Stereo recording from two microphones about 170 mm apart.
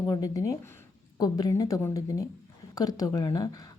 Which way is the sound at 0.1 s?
20° left (ahead or behind).